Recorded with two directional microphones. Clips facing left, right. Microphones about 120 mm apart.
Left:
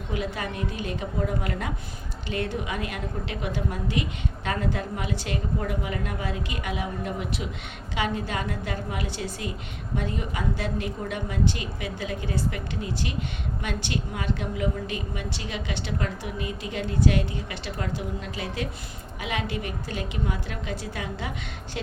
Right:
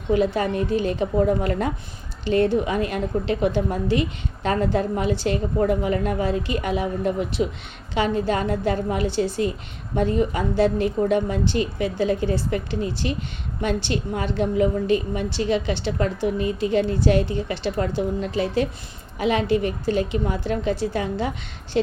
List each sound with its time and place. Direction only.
0.1 s a woman's voice: 35° right (ahead or behind)